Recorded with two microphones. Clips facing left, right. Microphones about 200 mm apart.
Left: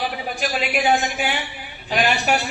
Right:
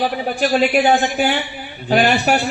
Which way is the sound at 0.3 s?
40° right (ahead or behind).